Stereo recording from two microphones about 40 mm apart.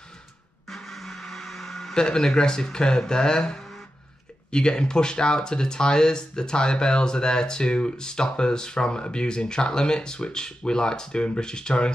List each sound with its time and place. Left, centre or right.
0.7 s music: centre
2.0 s speech: centre